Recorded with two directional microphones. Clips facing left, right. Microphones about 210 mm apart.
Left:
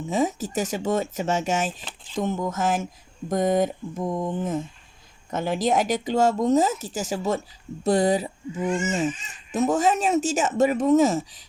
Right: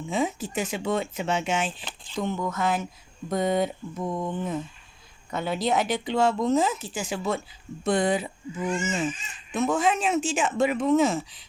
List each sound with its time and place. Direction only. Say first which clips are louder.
0.0 s speech: left 3 dB; 40° left (ahead or behind)